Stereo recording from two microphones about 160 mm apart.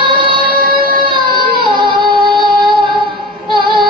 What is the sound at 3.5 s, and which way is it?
Female singing, 30° right (ahead or behind).